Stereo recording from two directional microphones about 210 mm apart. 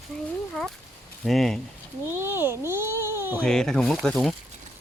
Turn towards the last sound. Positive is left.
turn(degrees=5)  # may be behind; listen again after turning